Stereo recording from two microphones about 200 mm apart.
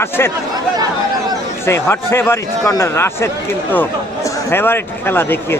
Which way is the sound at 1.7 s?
10° left (ahead or behind).